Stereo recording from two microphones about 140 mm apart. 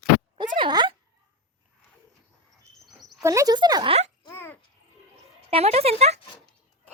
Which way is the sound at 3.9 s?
50° right (ahead or behind).